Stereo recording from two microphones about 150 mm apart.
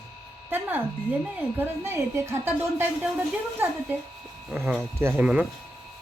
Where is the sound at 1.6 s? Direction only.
15° right (ahead or behind).